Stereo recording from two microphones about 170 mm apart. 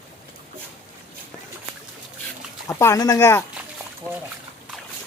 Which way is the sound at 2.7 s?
15° left (ahead or behind).